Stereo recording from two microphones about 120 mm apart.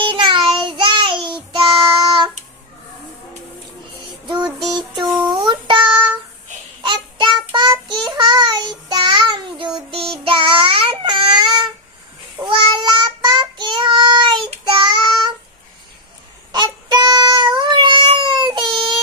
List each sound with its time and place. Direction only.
0.0 s child singing: 40° right (ahead or behind)
5.3 s child singing: 40° right (ahead or behind)
16.5 s child singing: 35° right (ahead or behind)